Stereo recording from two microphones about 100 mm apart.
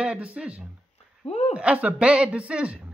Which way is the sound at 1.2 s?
90° left.